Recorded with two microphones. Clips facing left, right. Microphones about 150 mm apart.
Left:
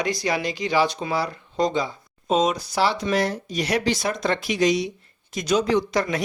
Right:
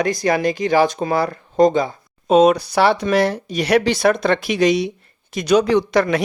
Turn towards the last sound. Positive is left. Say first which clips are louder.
# right 6 dB
turn(degrees=-70)  # may be behind; listen again after turning